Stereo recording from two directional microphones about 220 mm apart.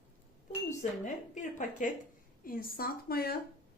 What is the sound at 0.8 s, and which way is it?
Speech, 35° left (ahead or behind).